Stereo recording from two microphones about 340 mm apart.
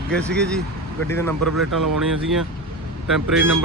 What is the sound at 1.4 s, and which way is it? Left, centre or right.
Speech, right.